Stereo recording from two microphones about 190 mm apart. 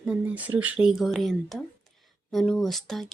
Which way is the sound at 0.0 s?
5° right (ahead or behind).